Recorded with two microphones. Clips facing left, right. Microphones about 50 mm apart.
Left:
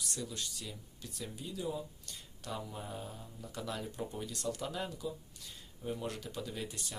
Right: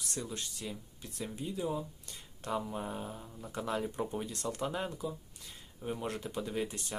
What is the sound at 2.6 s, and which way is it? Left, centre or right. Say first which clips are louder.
Speech: right 5 dB; right.